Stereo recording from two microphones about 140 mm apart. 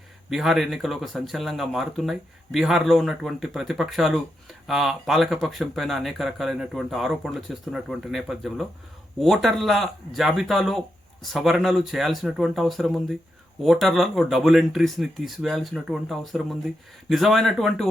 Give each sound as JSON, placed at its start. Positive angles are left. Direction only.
{"t": 0.3, "sound": "speech", "side_deg": 0}